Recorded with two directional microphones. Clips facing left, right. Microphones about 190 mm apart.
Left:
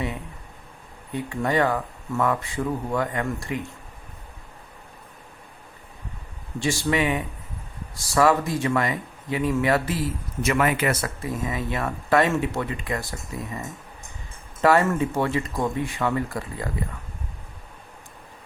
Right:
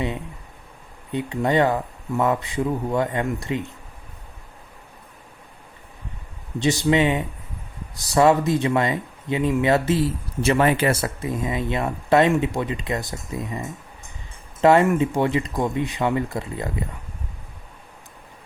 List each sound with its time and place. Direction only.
1.1 s speech: 20° right (ahead or behind)
6.6 s speech: 20° right (ahead or behind)
14.6 s speech: 20° right (ahead or behind)